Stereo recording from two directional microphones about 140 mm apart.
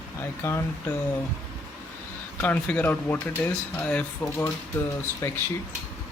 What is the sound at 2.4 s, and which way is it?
Speech, 10° left (ahead or behind).